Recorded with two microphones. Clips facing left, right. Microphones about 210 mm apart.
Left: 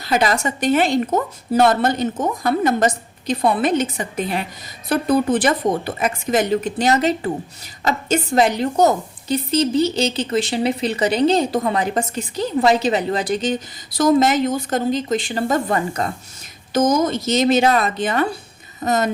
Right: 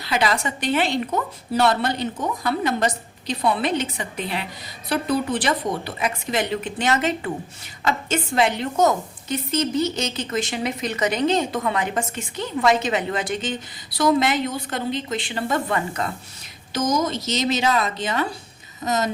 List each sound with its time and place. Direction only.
0.0 s a woman's voice: 45° left (ahead or behind)
16.7 s a woman's voice: 50° left (ahead or behind)